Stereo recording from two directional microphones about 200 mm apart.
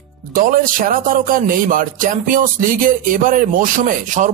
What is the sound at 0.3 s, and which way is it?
A man's voice, 45° right (ahead or behind).